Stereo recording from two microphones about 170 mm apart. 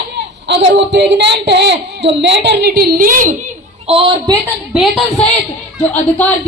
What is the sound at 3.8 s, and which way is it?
Music, 30° right (ahead or behind).